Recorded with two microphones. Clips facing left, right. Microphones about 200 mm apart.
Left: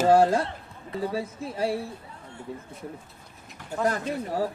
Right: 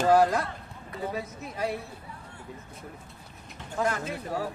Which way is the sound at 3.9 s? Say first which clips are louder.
Left 3 dB; 35° left (ahead or behind).